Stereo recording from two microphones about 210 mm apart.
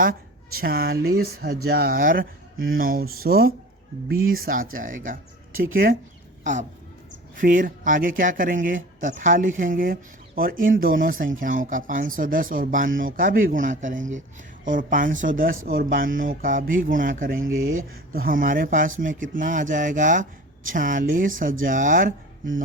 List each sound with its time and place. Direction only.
0.0 s a woman's voice: 45° right (ahead or behind)
17.6 s speech: 70° right (ahead or behind)
18.1 s speech: 45° right (ahead or behind)